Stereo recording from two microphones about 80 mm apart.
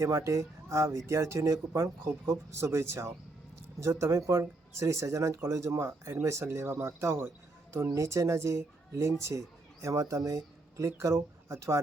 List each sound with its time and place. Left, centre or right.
0.0 s speech: right
2.0 s speech: right